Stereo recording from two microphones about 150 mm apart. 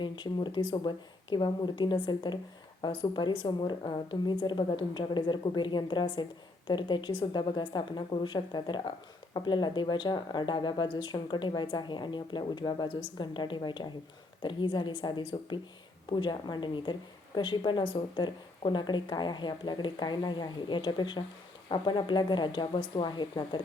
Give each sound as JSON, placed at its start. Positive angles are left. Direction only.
{"t": 0.0, "sound": "a woman's voice", "side_deg": 30}